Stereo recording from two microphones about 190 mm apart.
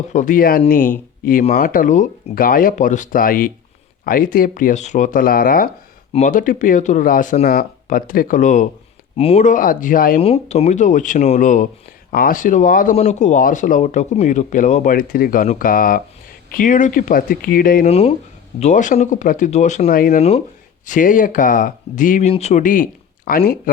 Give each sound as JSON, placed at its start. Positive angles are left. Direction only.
{"t": 0.1, "sound": "speech", "side_deg": 45}
{"t": 10.2, "sound": "speech", "side_deg": 30}
{"t": 17.8, "sound": "speech", "side_deg": 30}